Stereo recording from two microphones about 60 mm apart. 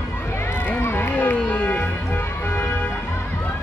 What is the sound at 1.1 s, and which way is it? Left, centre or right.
Music, left.